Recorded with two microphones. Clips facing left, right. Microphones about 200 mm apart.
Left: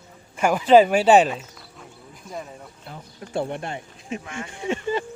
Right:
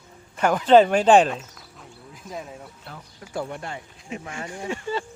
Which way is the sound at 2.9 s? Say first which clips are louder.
Left 7 dB; 25° left (ahead or behind).